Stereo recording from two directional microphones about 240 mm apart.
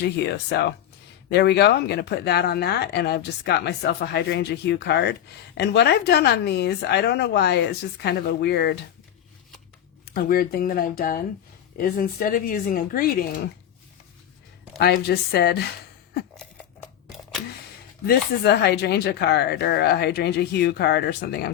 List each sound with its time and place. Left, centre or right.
0.2 s speech: left
10.1 s speech: left
14.8 s speech: left
16.4 s a sound: centre
18.0 s speech: left